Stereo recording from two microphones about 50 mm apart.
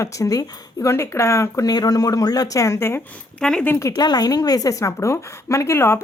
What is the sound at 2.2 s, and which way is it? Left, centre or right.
Speech, left.